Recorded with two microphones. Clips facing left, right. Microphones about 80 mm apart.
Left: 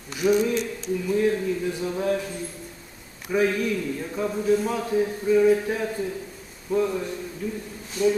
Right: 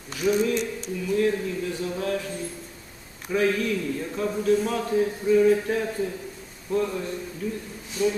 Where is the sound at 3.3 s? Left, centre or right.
Centre.